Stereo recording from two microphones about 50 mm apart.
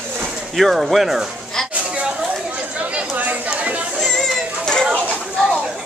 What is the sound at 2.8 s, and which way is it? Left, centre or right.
Chatter, right.